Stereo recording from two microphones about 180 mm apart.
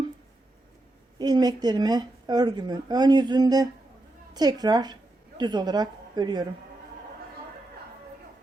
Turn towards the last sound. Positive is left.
turn(degrees=-25)  # may be behind; listen again after turning